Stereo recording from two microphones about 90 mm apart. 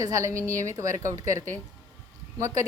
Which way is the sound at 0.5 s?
35° right (ahead or behind).